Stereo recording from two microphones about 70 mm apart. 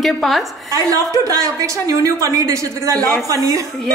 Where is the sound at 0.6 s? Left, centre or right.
Right.